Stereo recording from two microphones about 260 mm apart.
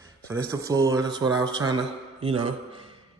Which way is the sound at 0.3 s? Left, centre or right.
Centre.